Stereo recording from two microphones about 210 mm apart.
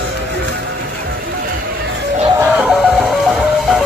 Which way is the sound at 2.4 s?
5° right (ahead or behind).